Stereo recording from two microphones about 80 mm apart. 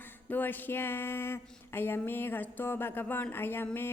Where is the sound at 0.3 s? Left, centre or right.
Left.